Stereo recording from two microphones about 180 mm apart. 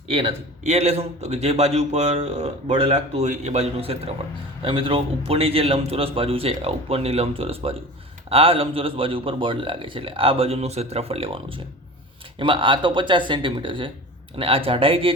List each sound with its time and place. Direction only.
0.1 s a man's voice: 30° right (ahead or behind)